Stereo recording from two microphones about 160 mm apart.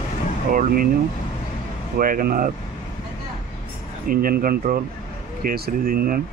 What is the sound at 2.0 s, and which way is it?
Speech, 65° right (ahead or behind).